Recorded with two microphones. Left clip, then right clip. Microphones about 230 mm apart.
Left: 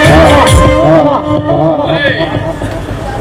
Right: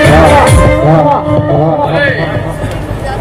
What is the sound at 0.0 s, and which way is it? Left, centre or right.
Music, left.